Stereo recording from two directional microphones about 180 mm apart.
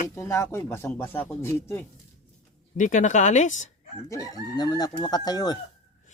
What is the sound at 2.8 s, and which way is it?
Speech, 45° left (ahead or behind).